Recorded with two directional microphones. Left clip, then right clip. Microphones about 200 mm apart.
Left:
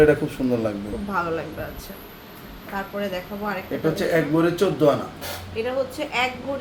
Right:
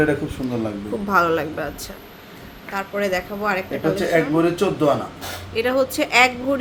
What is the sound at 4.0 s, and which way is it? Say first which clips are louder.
Speech: right 2 dB; 5° left (ahead or behind).